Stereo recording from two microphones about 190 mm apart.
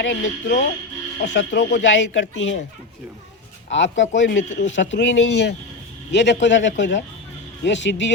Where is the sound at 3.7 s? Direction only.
75° left (ahead or behind).